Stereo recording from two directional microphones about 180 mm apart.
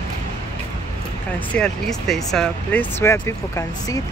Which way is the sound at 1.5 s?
5° left (ahead or behind).